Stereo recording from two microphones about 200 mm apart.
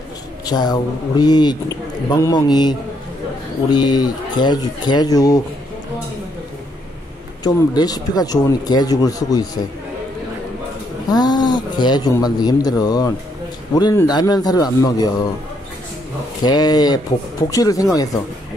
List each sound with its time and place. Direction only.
0.5 s speech: 20° left (ahead or behind)
3.7 s speech: 20° left (ahead or behind)
7.4 s speech: 20° left (ahead or behind)
11.1 s speech: 20° left (ahead or behind)
16.4 s speech: 20° left (ahead or behind)